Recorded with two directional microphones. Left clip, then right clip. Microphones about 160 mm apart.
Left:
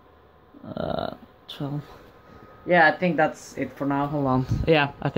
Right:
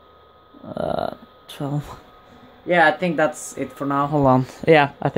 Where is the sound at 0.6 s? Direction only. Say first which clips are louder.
Right 5 dB; 10° right (ahead or behind).